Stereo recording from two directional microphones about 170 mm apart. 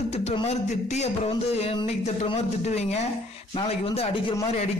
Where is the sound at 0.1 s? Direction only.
35° left (ahead or behind).